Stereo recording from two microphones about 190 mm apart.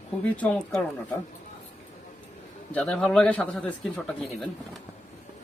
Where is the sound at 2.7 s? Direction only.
5° left (ahead or behind).